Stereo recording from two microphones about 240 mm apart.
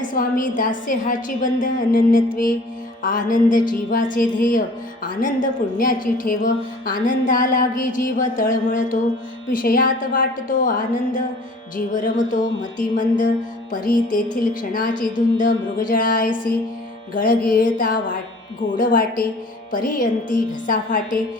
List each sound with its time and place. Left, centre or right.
0.0 s a woman's voice: left
13.8 s a woman's voice: left